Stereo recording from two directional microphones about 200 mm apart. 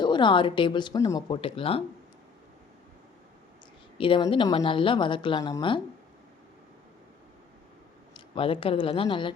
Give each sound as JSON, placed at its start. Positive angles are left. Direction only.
{"t": 0.0, "sound": "speech", "side_deg": 25}
{"t": 3.9, "sound": "speech", "side_deg": 25}
{"t": 8.1, "sound": "speech", "side_deg": 25}